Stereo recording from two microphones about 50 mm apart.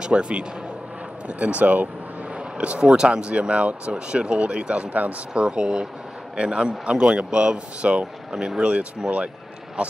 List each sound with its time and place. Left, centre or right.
0.0 s speech: centre
5.3 s speech: centre